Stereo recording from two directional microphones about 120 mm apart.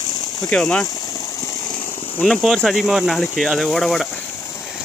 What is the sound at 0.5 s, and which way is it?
Speech, 5° left (ahead or behind).